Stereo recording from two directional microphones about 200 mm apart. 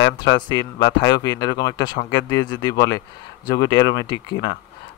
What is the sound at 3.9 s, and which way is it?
Speech, 20° left (ahead or behind).